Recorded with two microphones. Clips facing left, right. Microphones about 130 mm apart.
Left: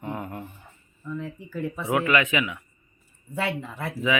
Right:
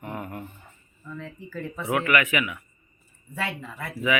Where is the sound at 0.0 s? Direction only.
20° left (ahead or behind).